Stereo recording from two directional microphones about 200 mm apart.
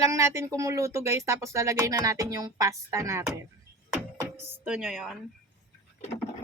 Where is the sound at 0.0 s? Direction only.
15° right (ahead or behind).